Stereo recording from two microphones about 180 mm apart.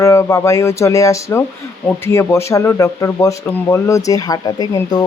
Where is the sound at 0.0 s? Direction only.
15° left (ahead or behind).